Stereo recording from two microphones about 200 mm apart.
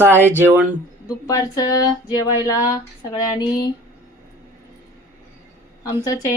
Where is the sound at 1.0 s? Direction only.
20° left (ahead or behind).